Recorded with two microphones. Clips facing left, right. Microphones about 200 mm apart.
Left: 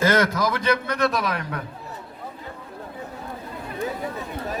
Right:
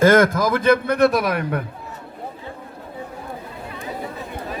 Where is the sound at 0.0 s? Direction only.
50° right (ahead or behind).